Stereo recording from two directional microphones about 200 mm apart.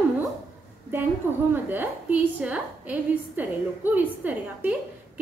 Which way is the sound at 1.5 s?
10° right (ahead or behind).